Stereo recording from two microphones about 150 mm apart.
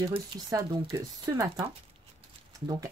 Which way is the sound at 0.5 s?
20° right (ahead or behind).